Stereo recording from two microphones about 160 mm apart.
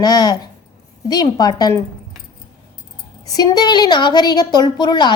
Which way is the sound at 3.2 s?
25° left (ahead or behind).